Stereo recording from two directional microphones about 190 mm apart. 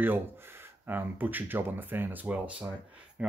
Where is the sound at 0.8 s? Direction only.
10° right (ahead or behind).